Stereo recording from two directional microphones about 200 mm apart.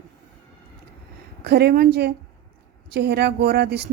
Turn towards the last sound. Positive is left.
turn(degrees=-55)  # may be behind; listen again after turning